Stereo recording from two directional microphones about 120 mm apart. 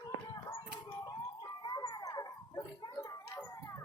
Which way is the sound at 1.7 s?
40° left (ahead or behind).